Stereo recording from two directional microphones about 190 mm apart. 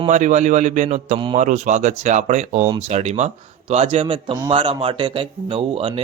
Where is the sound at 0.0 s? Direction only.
40° right (ahead or behind).